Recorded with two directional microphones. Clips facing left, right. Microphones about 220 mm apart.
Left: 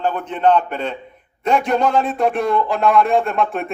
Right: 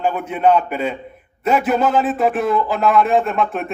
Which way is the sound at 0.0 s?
10° right (ahead or behind).